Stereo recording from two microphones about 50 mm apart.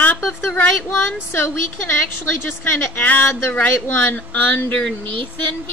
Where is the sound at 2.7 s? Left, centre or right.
Left.